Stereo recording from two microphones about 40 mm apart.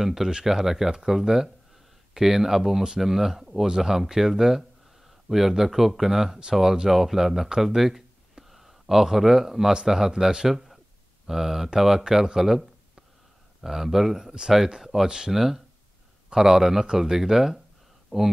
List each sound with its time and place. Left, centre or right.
0.0 s speech: centre
7.6 s a sound: centre
9.8 s speech: centre
10.5 s a sound: centre
11.2 s speech: centre
15.3 s speech: centre